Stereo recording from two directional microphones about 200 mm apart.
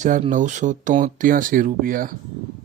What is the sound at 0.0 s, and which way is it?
Speech, 40° right (ahead or behind).